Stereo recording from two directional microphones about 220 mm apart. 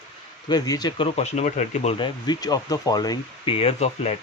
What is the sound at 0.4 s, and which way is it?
Speech, 15° left (ahead or behind).